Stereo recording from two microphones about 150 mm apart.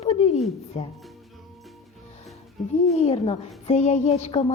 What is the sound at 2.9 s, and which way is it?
A woman's voice, 45° left (ahead or behind).